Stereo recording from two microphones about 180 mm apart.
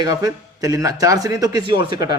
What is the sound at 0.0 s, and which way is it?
A man's voice, 20° right (ahead or behind).